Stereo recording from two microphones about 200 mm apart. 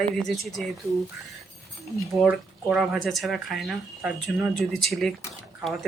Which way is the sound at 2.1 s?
5° right (ahead or behind).